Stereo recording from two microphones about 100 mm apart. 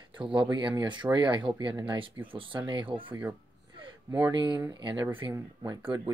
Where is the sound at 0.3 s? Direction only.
50° right (ahead or behind).